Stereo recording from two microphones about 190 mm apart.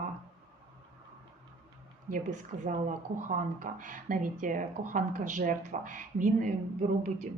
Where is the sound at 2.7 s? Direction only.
40° right (ahead or behind).